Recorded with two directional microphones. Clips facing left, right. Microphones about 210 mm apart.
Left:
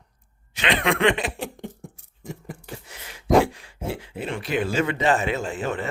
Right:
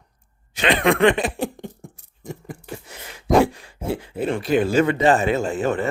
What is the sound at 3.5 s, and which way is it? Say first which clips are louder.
Speech: right 4 dB; 45° right (ahead or behind).